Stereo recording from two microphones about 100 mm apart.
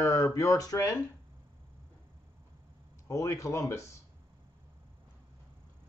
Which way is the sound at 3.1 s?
35° left (ahead or behind).